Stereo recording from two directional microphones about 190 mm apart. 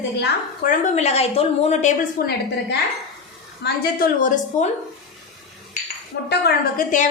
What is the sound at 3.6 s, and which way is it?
A woman's voice, 50° left (ahead or behind).